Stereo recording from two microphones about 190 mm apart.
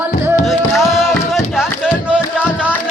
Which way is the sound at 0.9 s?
Centre (ahead or behind).